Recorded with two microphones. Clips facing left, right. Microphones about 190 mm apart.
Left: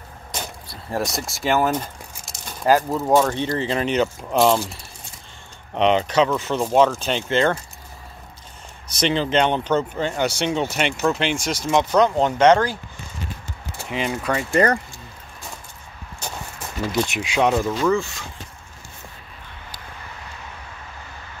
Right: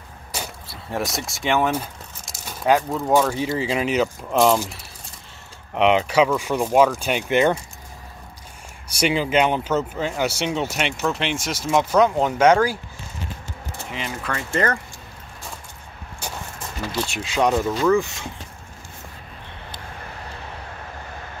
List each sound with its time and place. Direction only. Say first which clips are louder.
0.3 s speech: even; 5° right (ahead or behind)
1.7 s a sound: left 1 dB; 5° right (ahead or behind)
3.2 s speech: left 1 dB; 5° right (ahead or behind)
5.8 s speech: right 1 dB; 5° right (ahead or behind)
8.9 s speech: even; 10° right (ahead or behind)
14.2 s speech: left 4 dB; 15° left (ahead or behind)
16.9 s speech: left 5 dB; 15° left (ahead or behind)
17.4 s speech: even; 5° left (ahead or behind)